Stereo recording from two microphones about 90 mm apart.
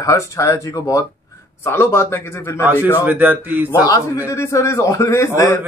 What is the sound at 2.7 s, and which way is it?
A man's voice, 20° right (ahead or behind).